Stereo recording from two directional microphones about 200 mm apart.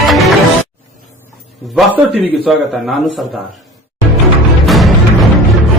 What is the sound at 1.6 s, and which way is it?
A man's voice, centre (ahead or behind).